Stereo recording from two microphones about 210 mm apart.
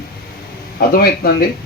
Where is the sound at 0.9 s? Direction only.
45° left (ahead or behind).